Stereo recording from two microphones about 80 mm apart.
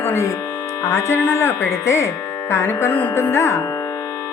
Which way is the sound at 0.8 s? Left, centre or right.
Left.